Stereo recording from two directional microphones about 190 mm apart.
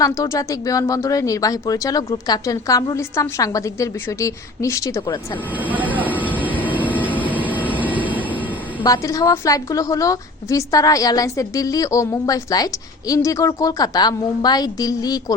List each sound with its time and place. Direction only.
0.0 s a woman's voice: 15° left (ahead or behind)
5.5 s vehicle: 10° right (ahead or behind)
7.7 s train: 10° right (ahead or behind)
8.8 s a woman's voice: 20° left (ahead or behind)